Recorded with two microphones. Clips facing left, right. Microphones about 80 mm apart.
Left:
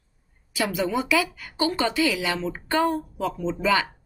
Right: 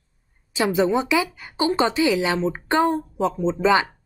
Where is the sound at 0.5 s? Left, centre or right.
Right.